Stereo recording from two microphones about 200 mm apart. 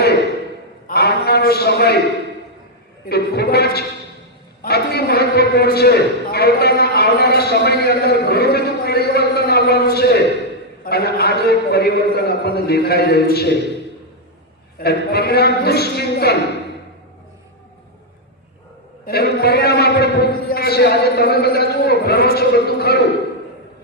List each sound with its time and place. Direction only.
0.9 s a sound: 50° left (ahead or behind)
3.1 s a man's voice: 50° left (ahead or behind)
4.6 s a sound: 50° left (ahead or behind)
10.8 s a man's voice: 50° left (ahead or behind)
14.8 s a man's voice: 50° left (ahead or behind)
19.0 s a man's voice: 50° left (ahead or behind)